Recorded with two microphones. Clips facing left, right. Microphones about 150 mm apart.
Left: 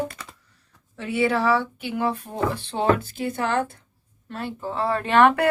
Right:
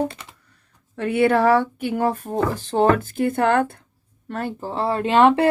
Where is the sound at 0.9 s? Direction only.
55° right (ahead or behind).